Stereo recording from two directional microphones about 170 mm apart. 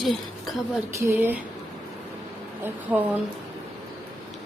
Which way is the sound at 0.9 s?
15° right (ahead or behind).